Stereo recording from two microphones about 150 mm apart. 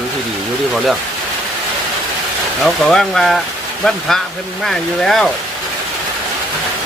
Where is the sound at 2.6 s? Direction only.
5° left (ahead or behind).